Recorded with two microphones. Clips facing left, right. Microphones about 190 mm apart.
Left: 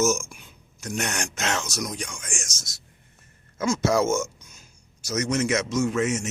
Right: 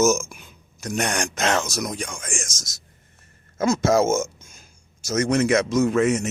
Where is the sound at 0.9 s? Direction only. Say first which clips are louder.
Right 5 dB; 55° right (ahead or behind).